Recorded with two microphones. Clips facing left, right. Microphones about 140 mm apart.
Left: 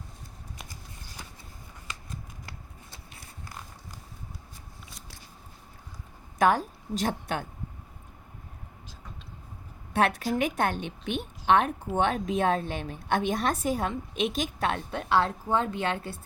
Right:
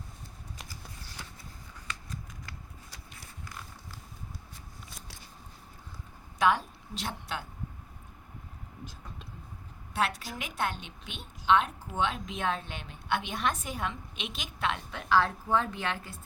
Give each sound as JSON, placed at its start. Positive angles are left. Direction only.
{"t": 6.4, "sound": "a woman's voice", "side_deg": 45}
{"t": 9.9, "sound": "a woman's voice", "side_deg": 55}
{"t": 12.2, "sound": "a woman's voice", "side_deg": 40}